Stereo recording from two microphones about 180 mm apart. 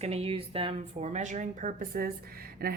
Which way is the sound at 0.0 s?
35° right (ahead or behind).